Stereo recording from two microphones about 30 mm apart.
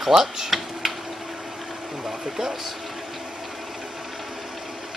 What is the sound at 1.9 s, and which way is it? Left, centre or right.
Speech, centre.